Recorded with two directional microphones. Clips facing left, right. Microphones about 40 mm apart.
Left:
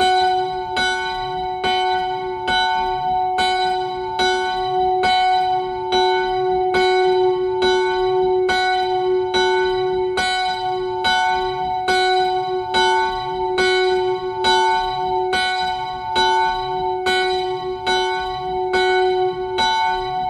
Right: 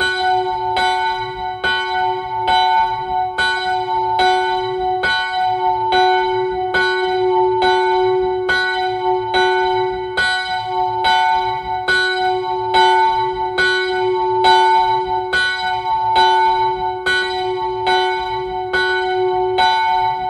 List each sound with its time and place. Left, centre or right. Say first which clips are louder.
0.2 s church bell: right 2 dB; centre
2.5 s church bell: right 5 dB; centre
5.0 s church bell: left 1 dB; right
11.1 s church bell: right 2 dB; centre
16.1 s church bell: right 4 dB; centre
17.8 s church bell: right 3 dB; centre